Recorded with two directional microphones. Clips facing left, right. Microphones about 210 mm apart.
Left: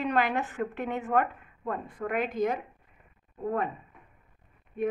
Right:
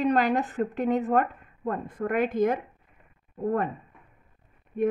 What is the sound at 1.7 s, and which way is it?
Speech, 45° right (ahead or behind).